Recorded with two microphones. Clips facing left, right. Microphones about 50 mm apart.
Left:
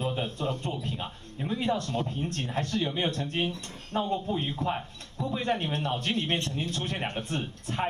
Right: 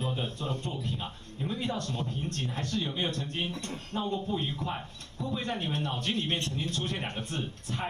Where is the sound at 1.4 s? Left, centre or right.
Left.